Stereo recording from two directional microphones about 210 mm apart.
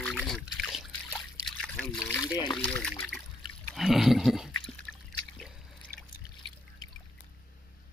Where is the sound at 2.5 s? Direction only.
5° left (ahead or behind).